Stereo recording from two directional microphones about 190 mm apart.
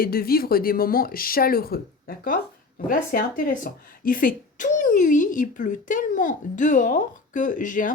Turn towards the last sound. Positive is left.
turn(degrees=45)  # may be behind; listen again after turning